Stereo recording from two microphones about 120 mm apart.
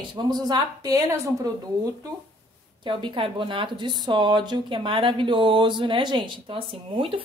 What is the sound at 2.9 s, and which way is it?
Speech, 40° right (ahead or behind).